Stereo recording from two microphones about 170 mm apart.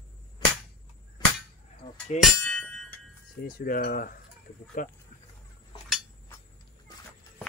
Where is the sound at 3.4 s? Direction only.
60° left (ahead or behind).